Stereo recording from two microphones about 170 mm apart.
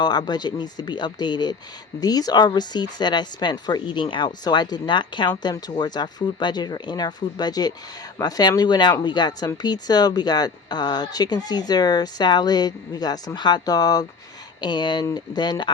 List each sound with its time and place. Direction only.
0.0 s speech: 25° left (ahead or behind)